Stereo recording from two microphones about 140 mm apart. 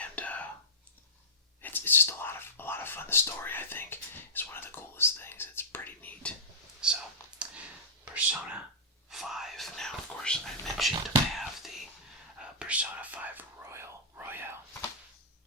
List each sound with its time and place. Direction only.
0.0 s whispering: 10° left (ahead or behind)
1.6 s whispering: 15° left (ahead or behind)
6.8 s a sound: 5° right (ahead or behind)
9.0 s whispering: centre (ahead or behind)